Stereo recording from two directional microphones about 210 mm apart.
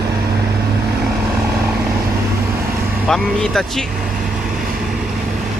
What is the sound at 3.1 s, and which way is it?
Speech, centre (ahead or behind).